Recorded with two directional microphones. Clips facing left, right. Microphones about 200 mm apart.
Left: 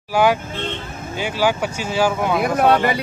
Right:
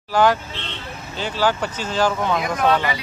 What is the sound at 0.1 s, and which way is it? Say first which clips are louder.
Speech: left 1 dB; 10° left (ahead or behind).